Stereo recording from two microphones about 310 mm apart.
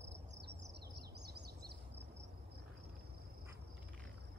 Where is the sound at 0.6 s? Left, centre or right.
Right.